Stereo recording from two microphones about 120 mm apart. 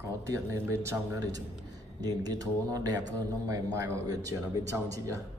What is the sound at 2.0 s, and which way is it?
Speech, 30° right (ahead or behind).